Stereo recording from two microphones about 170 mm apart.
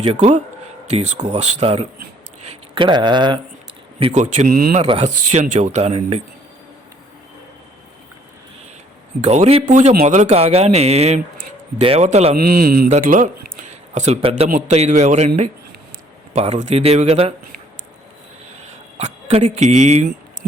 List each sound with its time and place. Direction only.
0.0 s speech: 40° right (ahead or behind)
4.1 s speech: 45° right (ahead or behind)
4.8 s speech: 40° right (ahead or behind)
9.2 s speech: 40° right (ahead or behind)
9.6 s speech: 50° right (ahead or behind)
12.4 s speech: 60° right (ahead or behind)
12.9 s speech: 50° right (ahead or behind)
16.3 s speech: 40° right (ahead or behind)
18.9 s speech: 40° right (ahead or behind)